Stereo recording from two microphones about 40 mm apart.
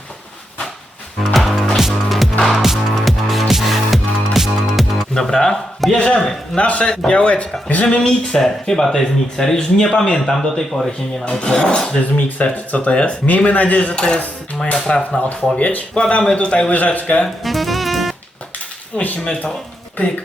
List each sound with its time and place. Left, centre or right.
1.2 s music: centre
5.1 s speech: centre
6.6 s speech: left
6.8 s speech: centre
7.1 s speech: left
7.9 s speech: left
8.3 s speech: centre
12.1 s speech: left
13.9 s speech: left
16.7 s speech: left
17.2 s music: centre
19.2 s speech: left